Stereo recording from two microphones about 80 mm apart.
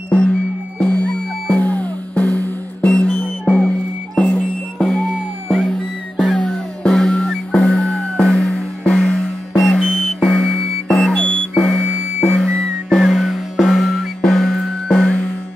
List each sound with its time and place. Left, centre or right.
0.1 s music: centre